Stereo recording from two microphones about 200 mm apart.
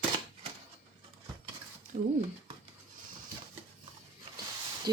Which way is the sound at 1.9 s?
35° right (ahead or behind).